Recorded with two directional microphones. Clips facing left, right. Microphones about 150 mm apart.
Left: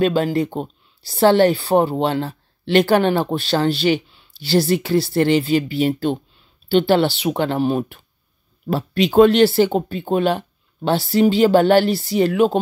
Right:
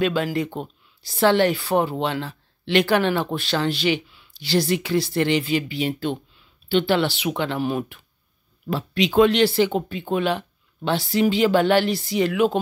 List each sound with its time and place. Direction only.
0.0 s speech: 35° left (ahead or behind)